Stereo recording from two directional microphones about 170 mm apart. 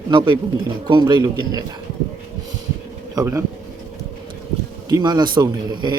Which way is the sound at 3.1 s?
15° right (ahead or behind).